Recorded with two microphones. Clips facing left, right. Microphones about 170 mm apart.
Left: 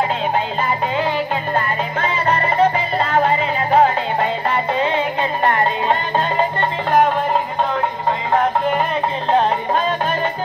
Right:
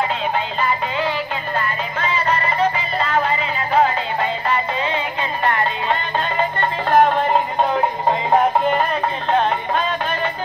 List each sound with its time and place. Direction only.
0.7 s music: 45° left (ahead or behind)
9.3 s music: 40° left (ahead or behind)